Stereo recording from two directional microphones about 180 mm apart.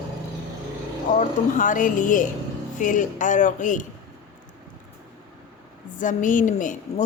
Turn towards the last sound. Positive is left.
turn(degrees=45)  # may be behind; listen again after turning